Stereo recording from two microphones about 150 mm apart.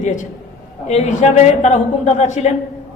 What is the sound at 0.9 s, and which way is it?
A woman's voice, 50° left (ahead or behind).